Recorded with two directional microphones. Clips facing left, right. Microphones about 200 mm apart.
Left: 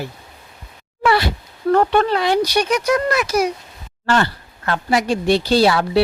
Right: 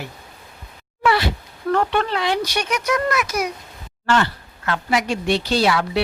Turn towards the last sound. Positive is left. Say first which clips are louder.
# left 4 dB
turn(degrees=35)  # may be behind; listen again after turning